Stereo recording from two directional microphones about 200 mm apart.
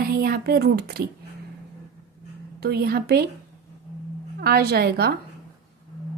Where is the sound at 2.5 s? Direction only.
50° right (ahead or behind).